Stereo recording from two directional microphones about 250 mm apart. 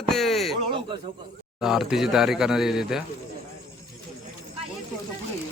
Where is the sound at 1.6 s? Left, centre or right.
Centre.